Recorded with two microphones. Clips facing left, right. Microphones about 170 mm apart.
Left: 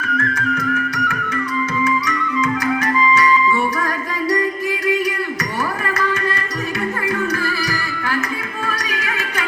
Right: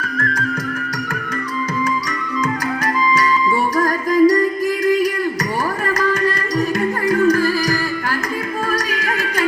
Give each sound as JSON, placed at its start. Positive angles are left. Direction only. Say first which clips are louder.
{"t": 0.0, "sound": "music", "louder": "left 1 dB", "side_deg": -35}
{"t": 3.8, "sound": "music", "louder": "right 9 dB", "side_deg": -40}
{"t": 7.1, "sound": "music", "louder": "right 11 dB", "side_deg": -35}